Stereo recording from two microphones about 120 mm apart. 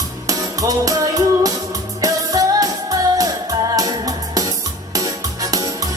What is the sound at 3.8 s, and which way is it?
Music, 30° right (ahead or behind).